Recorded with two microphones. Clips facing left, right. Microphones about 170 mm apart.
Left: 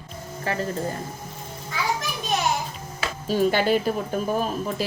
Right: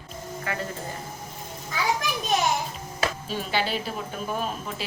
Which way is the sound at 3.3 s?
45° left (ahead or behind).